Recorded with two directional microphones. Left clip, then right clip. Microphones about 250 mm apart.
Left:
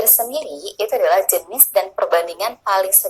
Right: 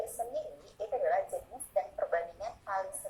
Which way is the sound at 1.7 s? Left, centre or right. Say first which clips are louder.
Left 15 dB; left.